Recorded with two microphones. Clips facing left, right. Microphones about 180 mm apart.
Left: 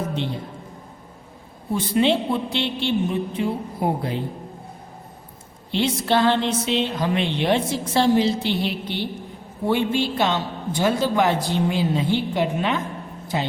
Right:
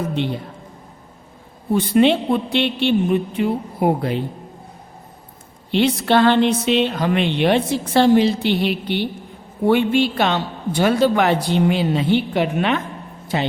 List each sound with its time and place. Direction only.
1.7 s a woman's voice: 60° right (ahead or behind)
5.7 s a woman's voice: 60° right (ahead or behind)